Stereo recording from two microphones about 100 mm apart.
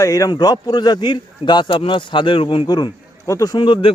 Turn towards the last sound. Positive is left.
turn(degrees=55)  # may be behind; listen again after turning